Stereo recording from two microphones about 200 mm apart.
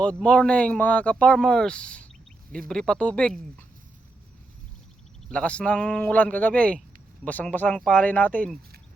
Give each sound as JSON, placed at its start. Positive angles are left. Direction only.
{"t": 0.0, "sound": "speech", "side_deg": 5}
{"t": 5.3, "sound": "speech", "side_deg": 5}